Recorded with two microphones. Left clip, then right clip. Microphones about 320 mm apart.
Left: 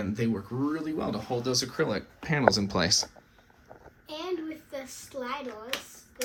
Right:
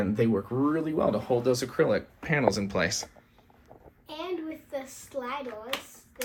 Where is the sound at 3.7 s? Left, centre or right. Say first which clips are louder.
Left 3 dB; right.